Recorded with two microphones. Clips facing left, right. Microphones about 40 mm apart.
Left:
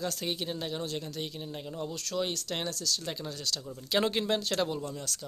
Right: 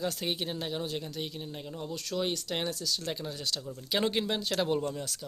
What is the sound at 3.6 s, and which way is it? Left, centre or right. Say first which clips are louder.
Speech: left 2 dB; centre.